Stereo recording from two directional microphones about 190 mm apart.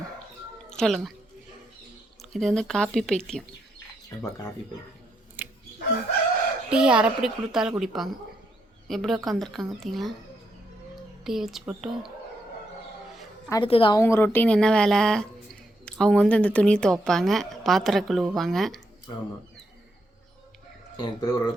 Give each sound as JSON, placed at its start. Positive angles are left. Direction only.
{"t": 0.7, "sound": "a woman's voice", "side_deg": 0}
{"t": 2.3, "sound": "speech", "side_deg": 0}
{"t": 5.4, "sound": "wild animals", "side_deg": -10}
{"t": 6.7, "sound": "speech", "side_deg": -5}
{"t": 11.2, "sound": "speech", "side_deg": 0}
{"t": 13.5, "sound": "a woman's voice", "side_deg": 25}
{"t": 14.0, "sound": "speech", "side_deg": 10}
{"t": 21.0, "sound": "a woman's voice", "side_deg": 25}